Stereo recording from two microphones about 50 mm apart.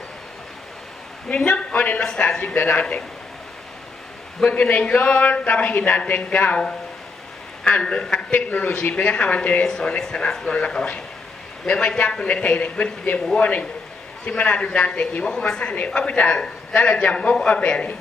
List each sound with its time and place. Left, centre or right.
1.3 s a man's voice: centre
2.5 s speech: left
4.4 s a man's voice: left
7.6 s a man's voice: left
8.3 s a man's voice: left
9.7 s a man's voice: centre
15.2 s a man's voice: centre